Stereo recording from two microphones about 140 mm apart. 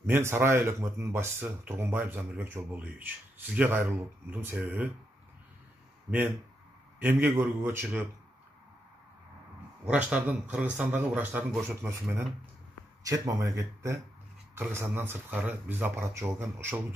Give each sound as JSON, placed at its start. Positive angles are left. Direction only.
{"t": 0.0, "sound": "speech", "side_deg": -15}
{"t": 6.0, "sound": "speech", "side_deg": -10}
{"t": 9.8, "sound": "speech", "side_deg": -10}